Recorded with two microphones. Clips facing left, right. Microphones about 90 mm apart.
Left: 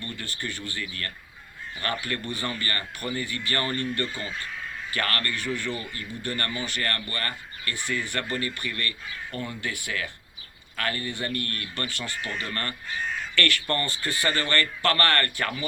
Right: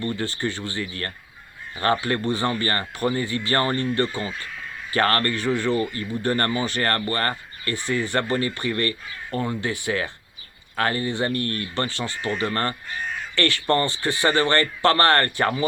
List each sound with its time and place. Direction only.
0.0 s speech: 30° right (ahead or behind)